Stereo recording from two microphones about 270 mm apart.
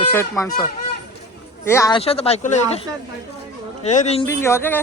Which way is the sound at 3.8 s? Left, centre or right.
Left.